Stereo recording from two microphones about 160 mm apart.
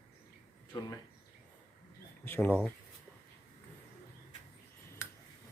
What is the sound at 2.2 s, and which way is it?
Speech, 15° left (ahead or behind).